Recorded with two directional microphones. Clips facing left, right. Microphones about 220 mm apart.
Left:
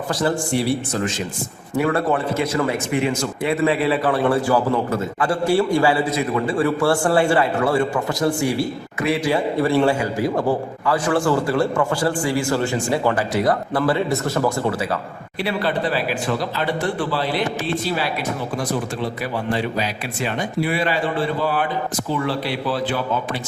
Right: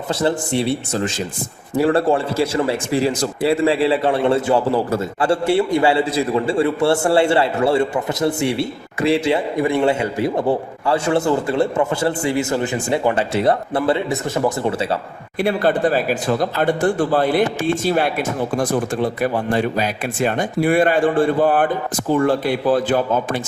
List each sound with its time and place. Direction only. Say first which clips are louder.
0.1 s a man's voice: right 2 dB; 25° right (ahead or behind)
15.4 s speech: right 5 dB; 50° right (ahead or behind)